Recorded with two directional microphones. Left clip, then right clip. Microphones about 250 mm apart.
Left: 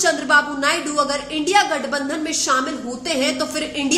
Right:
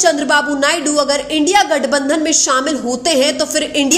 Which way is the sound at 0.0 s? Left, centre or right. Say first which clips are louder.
Right 3 dB; right.